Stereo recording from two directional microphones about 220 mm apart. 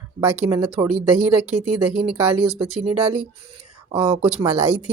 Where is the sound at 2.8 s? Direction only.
25° right (ahead or behind).